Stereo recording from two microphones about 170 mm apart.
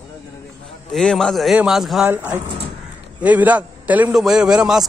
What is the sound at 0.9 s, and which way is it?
A man's voice, 5° left (ahead or behind).